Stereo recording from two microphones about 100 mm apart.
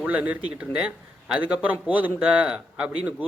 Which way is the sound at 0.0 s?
15° right (ahead or behind).